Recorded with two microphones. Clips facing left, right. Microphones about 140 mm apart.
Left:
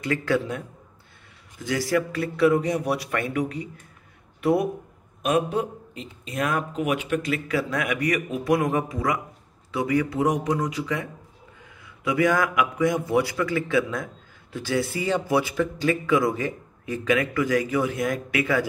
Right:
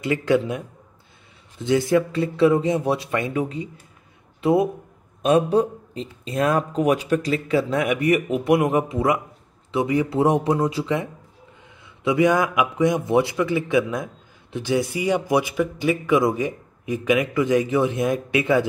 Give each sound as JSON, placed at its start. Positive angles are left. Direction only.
{"t": 0.0, "sound": "a man's voice", "side_deg": -20}
{"t": 5.2, "sound": "a man's voice", "side_deg": -35}